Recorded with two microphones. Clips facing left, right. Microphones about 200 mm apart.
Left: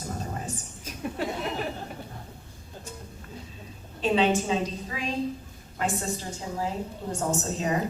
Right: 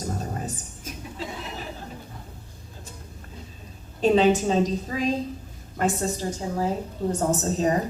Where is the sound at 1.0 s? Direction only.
60° left (ahead or behind).